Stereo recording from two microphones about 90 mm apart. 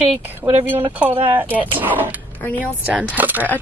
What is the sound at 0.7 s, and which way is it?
Speech, 20° right (ahead or behind).